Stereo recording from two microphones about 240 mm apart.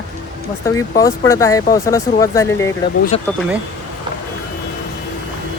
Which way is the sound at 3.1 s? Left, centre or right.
Left.